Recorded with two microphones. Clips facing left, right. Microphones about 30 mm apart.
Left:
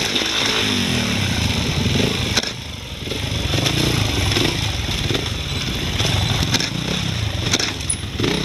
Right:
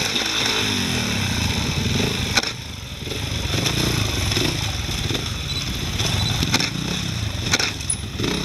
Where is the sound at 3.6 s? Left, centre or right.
Centre.